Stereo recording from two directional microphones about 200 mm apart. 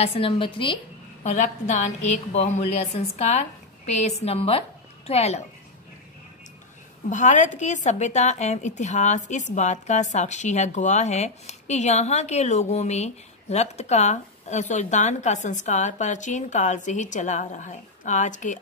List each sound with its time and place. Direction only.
0.0 s a woman's voice: 30° left (ahead or behind)
1.2 s speech: 35° left (ahead or behind)
7.1 s speech: 35° left (ahead or behind)